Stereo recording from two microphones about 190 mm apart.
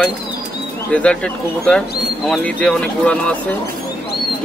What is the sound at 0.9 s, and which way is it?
Speech, 5° left (ahead or behind).